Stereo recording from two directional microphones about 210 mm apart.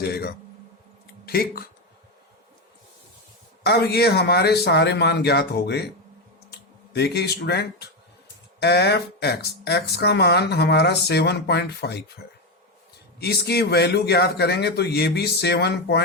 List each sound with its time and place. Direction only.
0.0 s speech: 50° left (ahead or behind)
3.6 s speech: 50° left (ahead or behind)
13.1 s speech: 50° left (ahead or behind)